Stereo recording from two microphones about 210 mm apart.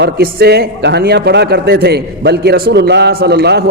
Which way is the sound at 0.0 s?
50° right (ahead or behind).